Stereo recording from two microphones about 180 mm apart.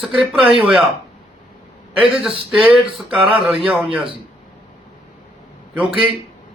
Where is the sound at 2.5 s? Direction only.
10° right (ahead or behind).